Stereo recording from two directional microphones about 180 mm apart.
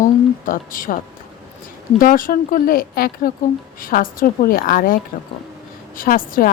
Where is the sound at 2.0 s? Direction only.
50° left (ahead or behind).